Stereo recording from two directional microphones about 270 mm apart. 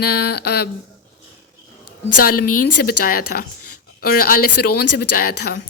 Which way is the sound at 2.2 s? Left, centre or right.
Left.